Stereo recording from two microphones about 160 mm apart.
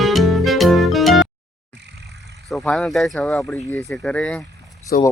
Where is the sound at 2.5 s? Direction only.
5° left (ahead or behind).